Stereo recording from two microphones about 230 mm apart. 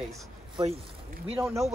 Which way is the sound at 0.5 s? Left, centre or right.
Right.